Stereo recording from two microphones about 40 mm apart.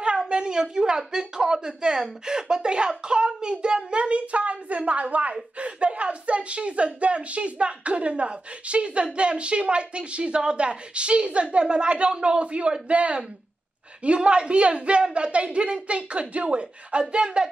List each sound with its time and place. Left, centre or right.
0.3 s speech: right